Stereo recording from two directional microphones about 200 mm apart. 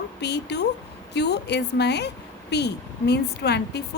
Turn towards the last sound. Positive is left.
turn(degrees=55)  # may be behind; listen again after turning